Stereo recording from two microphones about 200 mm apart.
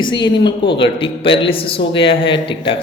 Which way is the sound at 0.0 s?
25° left (ahead or behind).